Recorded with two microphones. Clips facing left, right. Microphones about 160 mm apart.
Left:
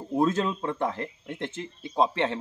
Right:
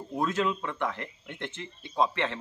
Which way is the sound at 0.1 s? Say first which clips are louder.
Left 4 dB; 35° left (ahead or behind).